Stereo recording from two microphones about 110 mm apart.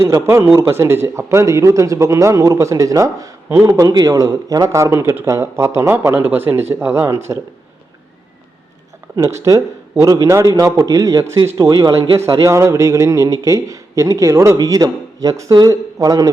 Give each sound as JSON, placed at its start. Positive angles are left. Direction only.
{"t": 0.0, "sound": "speech", "side_deg": -25}
{"t": 9.1, "sound": "a man's voice", "side_deg": -30}
{"t": 12.4, "sound": "speech", "side_deg": -25}